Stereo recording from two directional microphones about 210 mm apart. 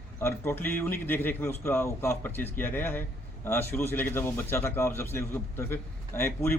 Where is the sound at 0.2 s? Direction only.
10° left (ahead or behind).